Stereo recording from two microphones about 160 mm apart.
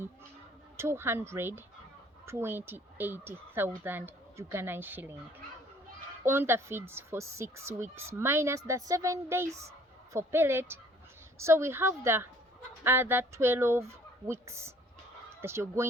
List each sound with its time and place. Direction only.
0.8 s speech: 15° right (ahead or behind)
6.2 s speech: 15° right (ahead or behind)